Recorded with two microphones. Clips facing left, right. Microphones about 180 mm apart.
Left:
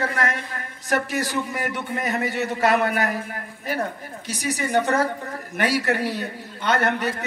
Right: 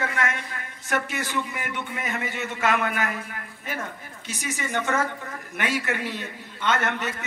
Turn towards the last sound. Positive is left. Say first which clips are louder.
# left 4 dB
turn(degrees=35)  # may be behind; listen again after turning